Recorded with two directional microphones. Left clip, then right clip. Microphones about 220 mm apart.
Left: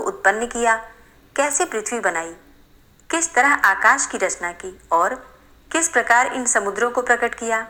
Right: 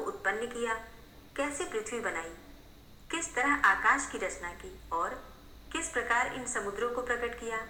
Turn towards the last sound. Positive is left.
turn(degrees=45)  # may be behind; listen again after turning